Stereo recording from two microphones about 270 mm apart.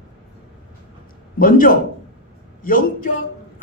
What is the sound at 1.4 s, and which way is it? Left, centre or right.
A man's voice, left.